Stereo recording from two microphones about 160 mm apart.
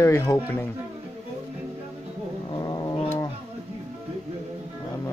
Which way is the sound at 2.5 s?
25° left (ahead or behind).